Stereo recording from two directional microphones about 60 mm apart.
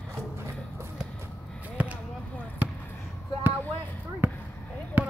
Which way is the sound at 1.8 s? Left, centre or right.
Right.